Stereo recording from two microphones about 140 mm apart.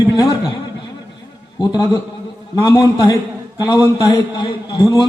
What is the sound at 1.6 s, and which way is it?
Speech, 30° left (ahead or behind).